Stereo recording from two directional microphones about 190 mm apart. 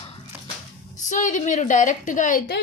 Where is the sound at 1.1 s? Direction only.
40° left (ahead or behind).